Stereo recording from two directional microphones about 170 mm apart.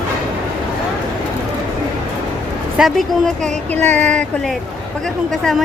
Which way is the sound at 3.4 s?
10° left (ahead or behind).